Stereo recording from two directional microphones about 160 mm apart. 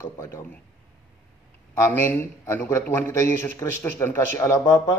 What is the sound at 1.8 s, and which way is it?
A man's voice, 15° left (ahead or behind).